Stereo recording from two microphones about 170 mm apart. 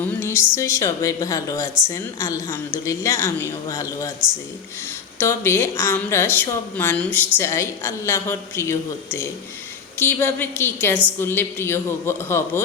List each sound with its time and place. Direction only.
0.0 s a woman's voice: 15° left (ahead or behind)
10.0 s a woman's voice: 10° left (ahead or behind)